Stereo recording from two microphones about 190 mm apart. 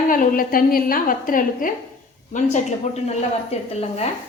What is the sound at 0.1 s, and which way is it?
A woman's voice, 45° left (ahead or behind).